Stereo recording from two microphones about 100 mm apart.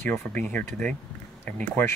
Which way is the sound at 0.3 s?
15° left (ahead or behind).